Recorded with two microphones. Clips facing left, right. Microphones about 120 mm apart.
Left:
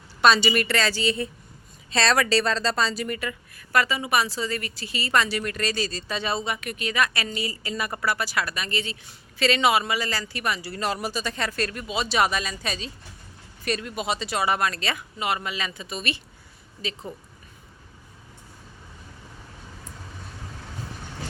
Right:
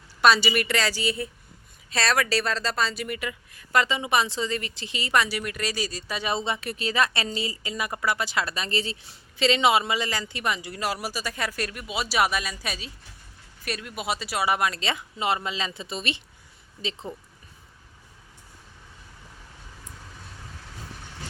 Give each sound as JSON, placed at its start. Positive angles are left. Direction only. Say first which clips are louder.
{"t": 0.2, "sound": "speech", "louder": "left 1 dB", "side_deg": -5}
{"t": 3.2, "sound": "speech", "louder": "left 1 dB", "side_deg": -15}
{"t": 6.3, "sound": "speech", "louder": "even", "side_deg": -25}
{"t": 7.5, "sound": "speech", "louder": "left 1 dB", "side_deg": -15}
{"t": 9.4, "sound": "speech", "louder": "even", "side_deg": -20}